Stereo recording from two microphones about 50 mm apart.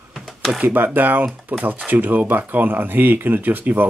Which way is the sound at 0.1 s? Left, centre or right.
Centre.